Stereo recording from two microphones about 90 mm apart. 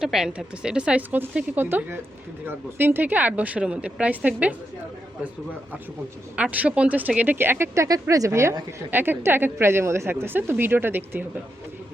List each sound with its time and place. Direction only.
0.0 s speech: 5° right (ahead or behind)
6.3 s a woman's voice: 15° right (ahead or behind)